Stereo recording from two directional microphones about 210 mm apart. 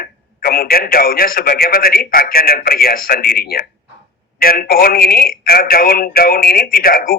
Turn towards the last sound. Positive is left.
turn(degrees=45)  # may be behind; listen again after turning